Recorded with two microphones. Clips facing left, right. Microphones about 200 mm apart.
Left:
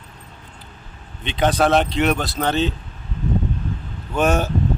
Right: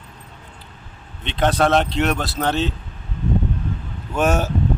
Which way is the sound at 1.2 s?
Centre (ahead or behind).